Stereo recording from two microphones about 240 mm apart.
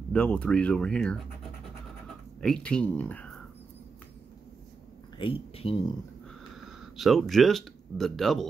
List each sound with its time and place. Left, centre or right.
0.1 s speech: centre
2.0 s a sound: centre
5.1 s speech: left
7.0 s speech: centre